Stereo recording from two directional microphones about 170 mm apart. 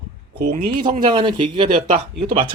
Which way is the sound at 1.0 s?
30° right (ahead or behind).